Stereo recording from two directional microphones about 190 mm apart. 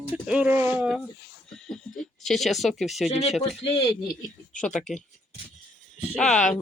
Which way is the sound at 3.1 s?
35° left (ahead or behind).